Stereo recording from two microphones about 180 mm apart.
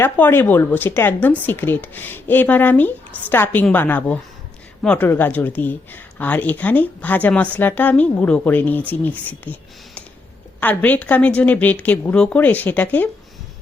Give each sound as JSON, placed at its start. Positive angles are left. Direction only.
{"t": 0.0, "sound": "speech", "side_deg": 10}